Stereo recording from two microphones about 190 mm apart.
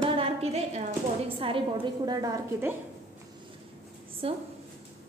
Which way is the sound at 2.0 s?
20° right (ahead or behind).